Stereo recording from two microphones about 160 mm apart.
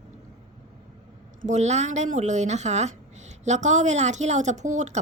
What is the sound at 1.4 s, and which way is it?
Speech, 45° right (ahead or behind).